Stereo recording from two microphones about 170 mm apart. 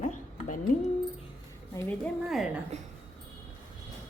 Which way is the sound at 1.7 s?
10° left (ahead or behind).